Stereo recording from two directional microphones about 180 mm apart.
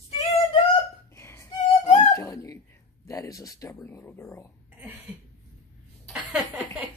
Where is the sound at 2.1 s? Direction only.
15° left (ahead or behind).